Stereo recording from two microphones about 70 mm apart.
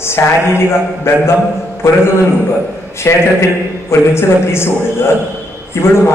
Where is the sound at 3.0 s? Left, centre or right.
Left.